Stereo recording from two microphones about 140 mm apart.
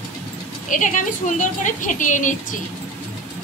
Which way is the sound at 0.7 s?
65° left (ahead or behind).